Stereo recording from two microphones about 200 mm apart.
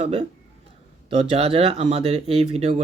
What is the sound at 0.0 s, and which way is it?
Speech, 30° right (ahead or behind).